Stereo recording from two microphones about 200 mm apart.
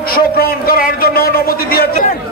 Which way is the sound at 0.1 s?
50° left (ahead or behind).